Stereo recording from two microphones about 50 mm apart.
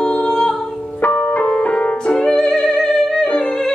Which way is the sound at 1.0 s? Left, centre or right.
Left.